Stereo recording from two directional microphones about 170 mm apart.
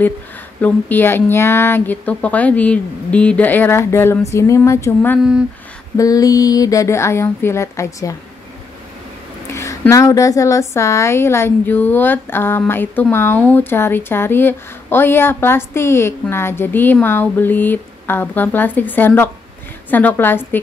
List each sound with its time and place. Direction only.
0.6 s a woman's voice: 10° left (ahead or behind)
9.5 s a woman's voice: 15° left (ahead or behind)